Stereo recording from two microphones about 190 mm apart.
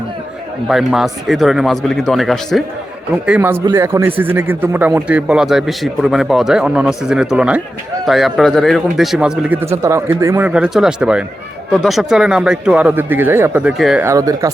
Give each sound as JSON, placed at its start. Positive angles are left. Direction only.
{"t": 0.7, "sound": "a man's voice", "side_deg": 0}
{"t": 3.2, "sound": "a man's voice", "side_deg": -10}
{"t": 14.0, "sound": "speech", "side_deg": -15}